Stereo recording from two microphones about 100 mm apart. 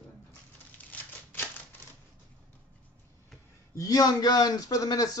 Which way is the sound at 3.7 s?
35° left (ahead or behind).